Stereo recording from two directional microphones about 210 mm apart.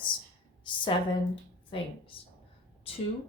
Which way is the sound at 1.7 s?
25° left (ahead or behind).